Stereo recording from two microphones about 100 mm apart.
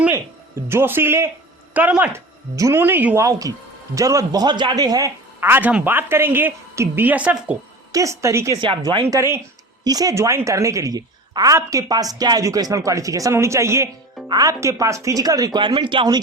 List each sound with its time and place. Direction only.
0.7 s a woman's voice: 20° right (ahead or behind)
2.1 s speech: 30° right (ahead or behind)
3.2 s speech: 30° right (ahead or behind)
5.4 s a woman's voice: 20° right (ahead or behind)
7.9 s a woman's voice: 30° right (ahead or behind)
15.6 s speech: 55° right (ahead or behind)